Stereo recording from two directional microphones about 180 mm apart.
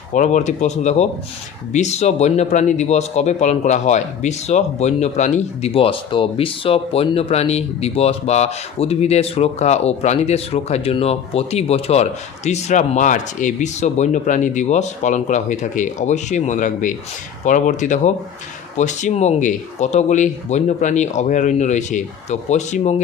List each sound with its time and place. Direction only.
0.1 s speech: 45° left (ahead or behind)